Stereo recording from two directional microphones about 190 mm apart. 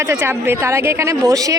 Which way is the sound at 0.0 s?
15° right (ahead or behind).